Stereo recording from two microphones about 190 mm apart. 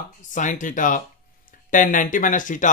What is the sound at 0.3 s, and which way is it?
Speech, 40° left (ahead or behind).